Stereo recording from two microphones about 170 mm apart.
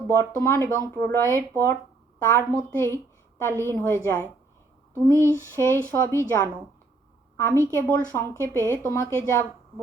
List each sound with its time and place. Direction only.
0.2 s a woman's voice: 15° left (ahead or behind)